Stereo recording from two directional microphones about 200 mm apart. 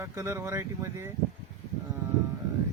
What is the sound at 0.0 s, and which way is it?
Speech, 10° right (ahead or behind).